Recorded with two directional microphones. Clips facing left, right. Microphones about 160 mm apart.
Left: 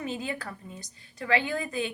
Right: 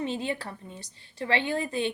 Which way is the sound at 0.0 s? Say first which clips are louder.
Right 3 dB; 30° right (ahead or behind).